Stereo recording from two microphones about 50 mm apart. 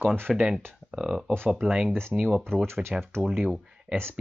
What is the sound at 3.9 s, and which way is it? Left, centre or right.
Speech, right.